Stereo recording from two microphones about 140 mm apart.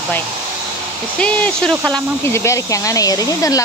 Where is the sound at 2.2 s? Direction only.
20° left (ahead or behind).